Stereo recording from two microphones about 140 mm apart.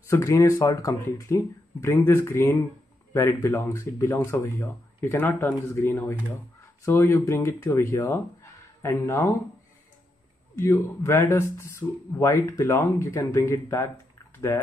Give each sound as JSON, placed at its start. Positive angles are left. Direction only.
{"t": 0.1, "sound": "speech", "side_deg": 20}
{"t": 10.6, "sound": "speech", "side_deg": 20}
{"t": 14.3, "sound": "a sound", "side_deg": 20}